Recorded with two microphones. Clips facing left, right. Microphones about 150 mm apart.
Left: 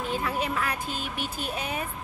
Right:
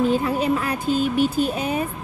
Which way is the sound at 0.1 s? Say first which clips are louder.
Right 8 dB; 30° right (ahead or behind).